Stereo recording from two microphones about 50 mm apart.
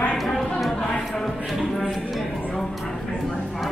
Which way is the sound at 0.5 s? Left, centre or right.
Centre.